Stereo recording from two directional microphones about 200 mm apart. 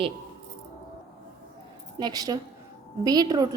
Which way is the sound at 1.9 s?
20° right (ahead or behind).